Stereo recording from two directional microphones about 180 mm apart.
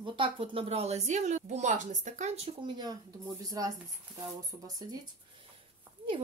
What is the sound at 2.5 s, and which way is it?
Speech, 25° right (ahead or behind).